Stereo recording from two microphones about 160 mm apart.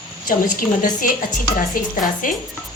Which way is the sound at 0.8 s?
60° left (ahead or behind).